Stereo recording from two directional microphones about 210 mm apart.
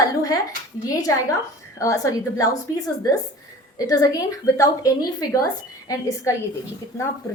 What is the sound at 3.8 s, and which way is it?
A woman's voice, 15° left (ahead or behind).